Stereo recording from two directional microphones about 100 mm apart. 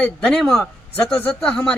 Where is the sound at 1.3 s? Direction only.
5° left (ahead or behind).